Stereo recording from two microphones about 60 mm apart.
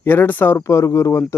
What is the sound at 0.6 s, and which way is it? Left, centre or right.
Speech, left.